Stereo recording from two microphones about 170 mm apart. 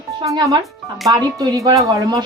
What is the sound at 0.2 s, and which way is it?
Speech, 20° right (ahead or behind).